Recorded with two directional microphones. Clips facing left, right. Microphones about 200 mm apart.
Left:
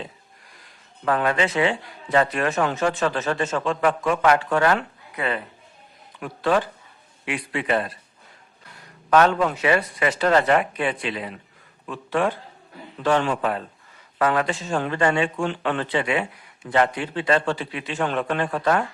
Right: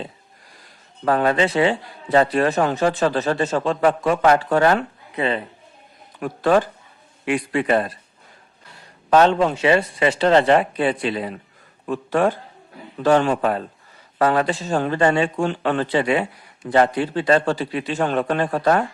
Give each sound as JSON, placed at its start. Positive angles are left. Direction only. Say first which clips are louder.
{"t": 1.0, "sound": "speech", "louder": "right 4 dB", "side_deg": -35}
{"t": 6.1, "sound": "a man's voice", "louder": "right 4 dB", "side_deg": -45}
{"t": 9.0, "sound": "speech", "louder": "right 3 dB", "side_deg": -25}